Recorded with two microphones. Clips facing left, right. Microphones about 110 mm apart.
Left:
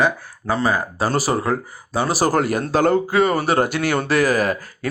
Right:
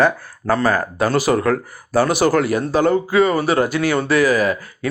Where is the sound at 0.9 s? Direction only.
35° left (ahead or behind).